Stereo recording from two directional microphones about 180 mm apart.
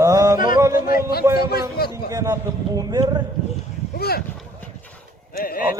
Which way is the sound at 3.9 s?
60° left (ahead or behind).